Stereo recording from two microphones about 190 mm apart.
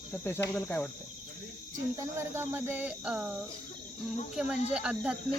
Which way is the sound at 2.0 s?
15° right (ahead or behind).